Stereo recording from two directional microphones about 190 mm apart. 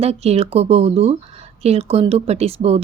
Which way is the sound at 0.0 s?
35° right (ahead or behind).